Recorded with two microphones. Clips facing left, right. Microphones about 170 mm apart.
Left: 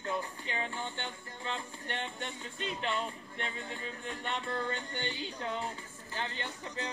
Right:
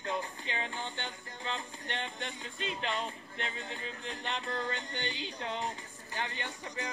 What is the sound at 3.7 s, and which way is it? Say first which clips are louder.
Speech: even; 40° left (ahead or behind).